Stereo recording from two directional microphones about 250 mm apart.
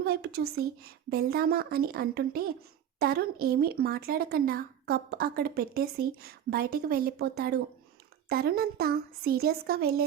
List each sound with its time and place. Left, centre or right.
0.0 s speech: right